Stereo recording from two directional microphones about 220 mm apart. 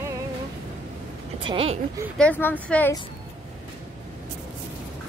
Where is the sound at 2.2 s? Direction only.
10° left (ahead or behind).